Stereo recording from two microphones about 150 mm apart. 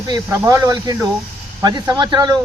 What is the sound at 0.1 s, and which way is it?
A man's voice, 25° right (ahead or behind).